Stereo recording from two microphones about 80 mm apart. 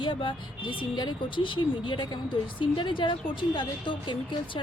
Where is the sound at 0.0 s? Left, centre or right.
Left.